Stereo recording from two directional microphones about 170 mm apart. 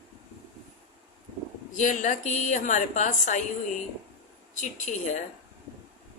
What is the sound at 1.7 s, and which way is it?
A woman's voice, 45° left (ahead or behind).